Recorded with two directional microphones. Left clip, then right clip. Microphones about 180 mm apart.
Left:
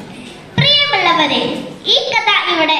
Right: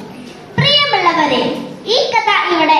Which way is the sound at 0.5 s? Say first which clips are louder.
Even; 50° left (ahead or behind).